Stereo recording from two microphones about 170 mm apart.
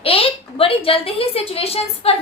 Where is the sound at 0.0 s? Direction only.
35° left (ahead or behind).